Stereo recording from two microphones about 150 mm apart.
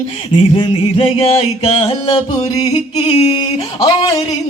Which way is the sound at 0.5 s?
35° left (ahead or behind).